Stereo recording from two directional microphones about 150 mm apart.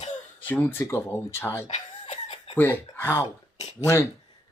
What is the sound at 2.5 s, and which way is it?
Speech, 10° left (ahead or behind).